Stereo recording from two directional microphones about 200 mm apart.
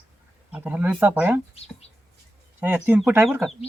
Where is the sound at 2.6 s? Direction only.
10° right (ahead or behind).